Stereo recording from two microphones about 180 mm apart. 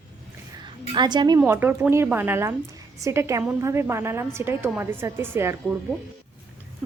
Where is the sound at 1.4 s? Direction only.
10° right (ahead or behind).